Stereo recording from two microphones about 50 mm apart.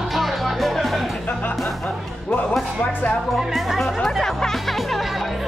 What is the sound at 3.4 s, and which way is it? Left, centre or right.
Speech, centre.